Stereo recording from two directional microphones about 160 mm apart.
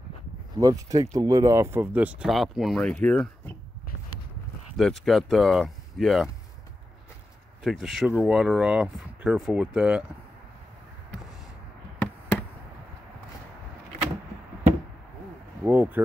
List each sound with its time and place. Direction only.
0.6 s speech: 20° right (ahead or behind); by 3.5 s 10° left (ahead or behind)
4.7 s speech: centre (ahead or behind)
7.6 s speech: centre (ahead or behind)
15.6 s speech: 10° right (ahead or behind)